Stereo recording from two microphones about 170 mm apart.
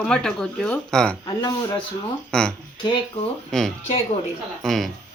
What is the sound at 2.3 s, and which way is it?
Speech, 5° left (ahead or behind).